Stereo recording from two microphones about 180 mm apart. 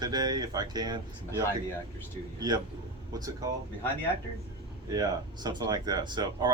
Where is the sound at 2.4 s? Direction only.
20° right (ahead or behind).